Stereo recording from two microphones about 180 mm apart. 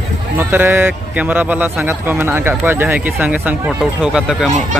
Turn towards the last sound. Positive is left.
turn(degrees=-5)  # may be behind; listen again after turning